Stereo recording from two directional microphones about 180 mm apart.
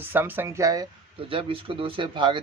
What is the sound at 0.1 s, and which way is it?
Speech, 10° right (ahead or behind).